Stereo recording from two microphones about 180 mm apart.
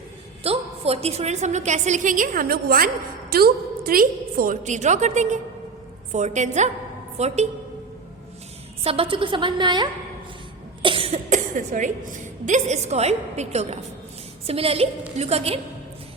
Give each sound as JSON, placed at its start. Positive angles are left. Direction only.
{"t": 0.4, "sound": "a woman's voice", "side_deg": -35}
{"t": 8.8, "sound": "a woman's voice", "side_deg": -30}